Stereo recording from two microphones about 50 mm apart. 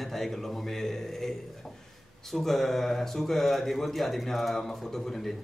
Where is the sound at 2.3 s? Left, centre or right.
Centre.